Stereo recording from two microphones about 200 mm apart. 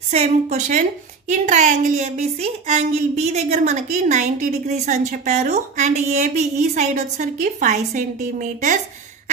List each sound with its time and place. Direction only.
0.1 s a woman's voice: 35° right (ahead or behind)